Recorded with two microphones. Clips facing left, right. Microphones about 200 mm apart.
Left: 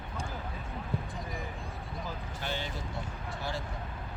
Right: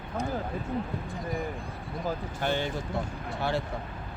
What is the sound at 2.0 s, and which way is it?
Speech, 55° right (ahead or behind).